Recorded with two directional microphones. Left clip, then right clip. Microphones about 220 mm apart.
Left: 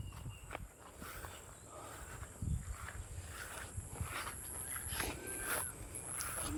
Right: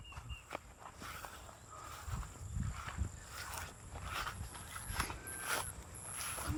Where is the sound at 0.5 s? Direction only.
45° right (ahead or behind).